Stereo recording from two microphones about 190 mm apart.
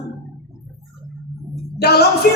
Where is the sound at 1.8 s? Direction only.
60° left (ahead or behind).